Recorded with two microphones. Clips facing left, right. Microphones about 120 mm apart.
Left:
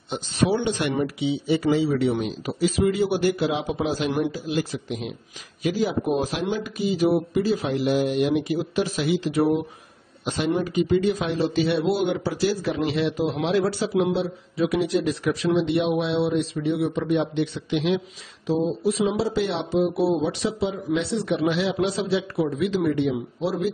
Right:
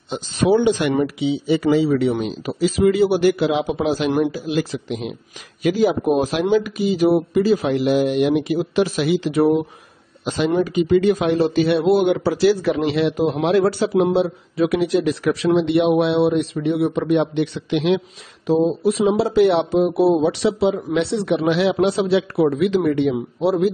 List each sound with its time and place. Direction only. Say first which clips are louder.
0.7 s speech: right 5 dB; 90° right
5.6 s speech: right 6 dB; 70° right (ahead or behind)
18.5 s speech: right 6 dB; 60° right (ahead or behind)
23.4 s speech: right 8 dB; 55° right (ahead or behind)